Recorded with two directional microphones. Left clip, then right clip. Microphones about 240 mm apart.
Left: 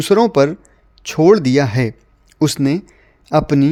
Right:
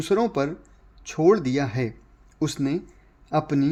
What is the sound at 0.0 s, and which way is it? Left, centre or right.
Speech, left.